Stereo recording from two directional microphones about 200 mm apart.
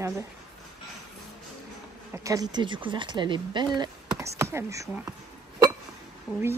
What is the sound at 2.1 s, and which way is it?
Speech, 15° right (ahead or behind).